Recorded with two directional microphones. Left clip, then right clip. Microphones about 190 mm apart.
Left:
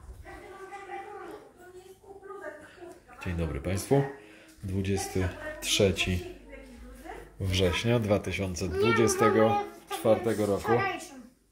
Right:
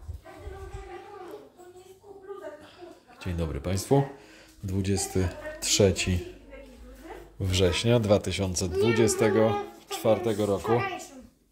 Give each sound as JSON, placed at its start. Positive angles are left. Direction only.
{"t": 3.2, "sound": "speech", "side_deg": -20}
{"t": 7.3, "sound": "speech", "side_deg": -25}